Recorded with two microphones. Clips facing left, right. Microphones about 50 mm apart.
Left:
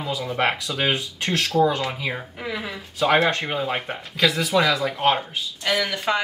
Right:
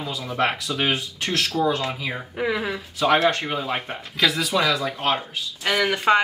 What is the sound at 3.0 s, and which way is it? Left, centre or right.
Speech, centre.